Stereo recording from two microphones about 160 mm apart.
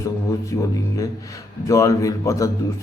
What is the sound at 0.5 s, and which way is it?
A man's voice, 20° left (ahead or behind).